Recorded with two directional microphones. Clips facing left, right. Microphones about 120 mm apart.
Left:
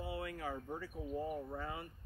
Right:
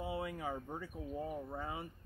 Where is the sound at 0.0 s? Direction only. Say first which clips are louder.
Right 2 dB; 20° right (ahead or behind).